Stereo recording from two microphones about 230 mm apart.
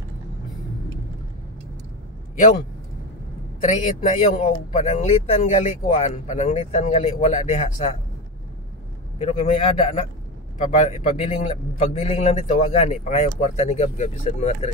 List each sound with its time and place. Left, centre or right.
3.6 s speech: left
9.2 s a man's voice: left